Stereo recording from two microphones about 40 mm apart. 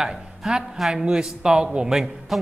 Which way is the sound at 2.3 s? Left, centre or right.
Centre.